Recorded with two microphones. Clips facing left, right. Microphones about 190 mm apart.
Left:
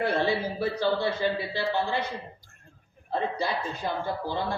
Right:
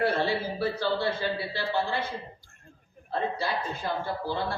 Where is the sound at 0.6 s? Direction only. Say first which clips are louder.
Left 2 dB; 15° left (ahead or behind).